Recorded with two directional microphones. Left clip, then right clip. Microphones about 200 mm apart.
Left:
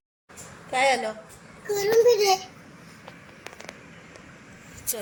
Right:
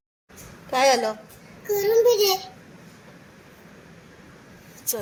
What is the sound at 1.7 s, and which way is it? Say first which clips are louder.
Speech: right 1 dB; 5° right (ahead or behind).